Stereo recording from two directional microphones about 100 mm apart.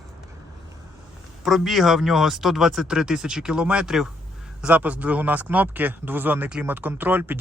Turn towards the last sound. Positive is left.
turn(degrees=-20)  # may be behind; listen again after turning